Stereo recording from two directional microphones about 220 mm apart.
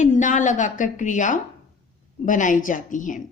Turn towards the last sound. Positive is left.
turn(degrees=35)  # may be behind; listen again after turning